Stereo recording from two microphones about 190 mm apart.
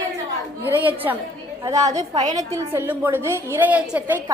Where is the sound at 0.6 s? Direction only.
10° right (ahead or behind).